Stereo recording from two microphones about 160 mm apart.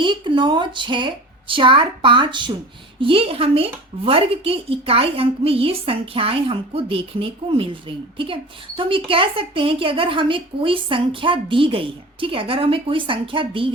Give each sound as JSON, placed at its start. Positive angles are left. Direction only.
{"t": 0.0, "sound": "a woman's voice", "side_deg": -30}